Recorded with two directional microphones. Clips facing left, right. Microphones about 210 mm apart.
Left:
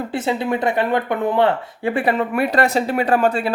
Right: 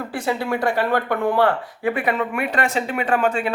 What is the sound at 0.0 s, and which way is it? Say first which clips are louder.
Speech: left 3 dB; 20° left (ahead or behind).